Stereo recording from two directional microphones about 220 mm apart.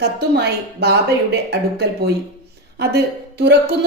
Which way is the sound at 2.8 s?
45° right (ahead or behind).